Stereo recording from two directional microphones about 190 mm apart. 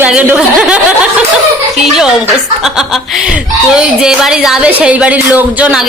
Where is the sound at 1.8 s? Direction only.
5° right (ahead or behind).